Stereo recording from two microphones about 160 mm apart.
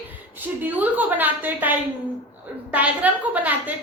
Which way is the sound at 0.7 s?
10° right (ahead or behind).